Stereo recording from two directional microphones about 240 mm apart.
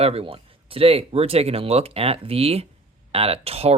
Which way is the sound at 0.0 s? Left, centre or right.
Right.